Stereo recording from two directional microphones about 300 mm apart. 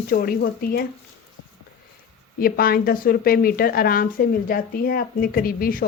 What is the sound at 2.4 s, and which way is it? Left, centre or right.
Speech, left.